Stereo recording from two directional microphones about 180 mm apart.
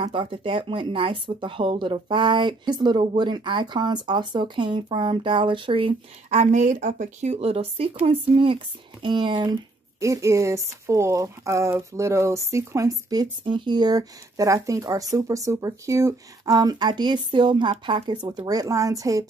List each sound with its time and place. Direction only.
0.0 s speech: 25° right (ahead or behind)